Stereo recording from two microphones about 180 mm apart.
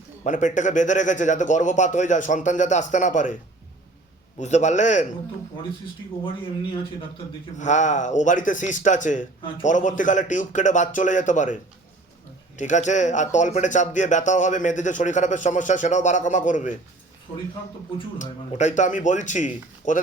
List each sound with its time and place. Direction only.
0.3 s speech: 45° left (ahead or behind)
4.4 s a man's voice: 40° left (ahead or behind)
7.6 s speech: 40° left (ahead or behind)
12.5 s speech: 45° left (ahead or behind)
18.2 s speech: 40° left (ahead or behind)